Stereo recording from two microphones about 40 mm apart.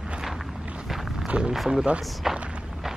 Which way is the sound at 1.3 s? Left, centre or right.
Right.